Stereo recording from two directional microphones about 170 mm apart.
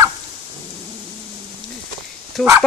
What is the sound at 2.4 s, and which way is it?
Speech, 5° left (ahead or behind).